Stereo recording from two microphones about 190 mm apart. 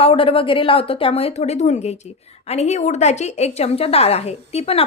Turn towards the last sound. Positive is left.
turn(degrees=35)  # may be behind; listen again after turning